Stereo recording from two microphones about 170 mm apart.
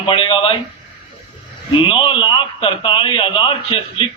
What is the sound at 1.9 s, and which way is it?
A man's voice, 30° left (ahead or behind).